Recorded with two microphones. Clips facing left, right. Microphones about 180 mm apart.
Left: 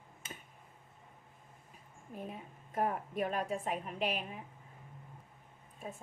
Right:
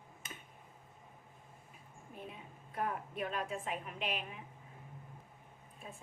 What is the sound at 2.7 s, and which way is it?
A woman's voice, 45° left (ahead or behind).